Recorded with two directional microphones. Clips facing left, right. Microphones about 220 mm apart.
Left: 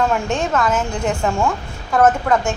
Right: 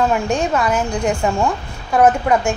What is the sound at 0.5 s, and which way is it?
Speech, 15° right (ahead or behind).